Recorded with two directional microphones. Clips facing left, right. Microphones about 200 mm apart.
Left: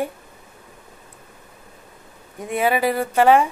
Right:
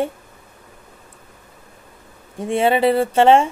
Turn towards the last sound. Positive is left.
turn(degrees=-25)  # may be behind; listen again after turning